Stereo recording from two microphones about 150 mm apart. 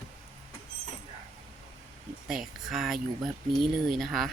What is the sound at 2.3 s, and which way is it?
Speech, centre (ahead or behind).